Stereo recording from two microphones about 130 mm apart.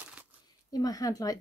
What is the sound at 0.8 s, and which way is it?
Speech, 30° left (ahead or behind).